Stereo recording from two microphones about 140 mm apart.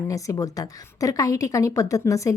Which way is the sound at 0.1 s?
25° left (ahead or behind).